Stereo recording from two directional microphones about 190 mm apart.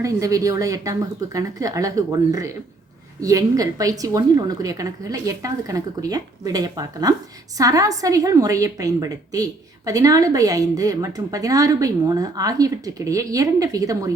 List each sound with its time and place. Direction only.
0.0 s a woman's voice: 15° right (ahead or behind)